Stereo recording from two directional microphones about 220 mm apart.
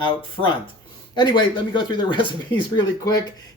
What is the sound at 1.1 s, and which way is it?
Speech, 20° left (ahead or behind).